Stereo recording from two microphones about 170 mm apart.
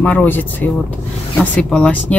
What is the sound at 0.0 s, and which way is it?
Speech, 10° left (ahead or behind).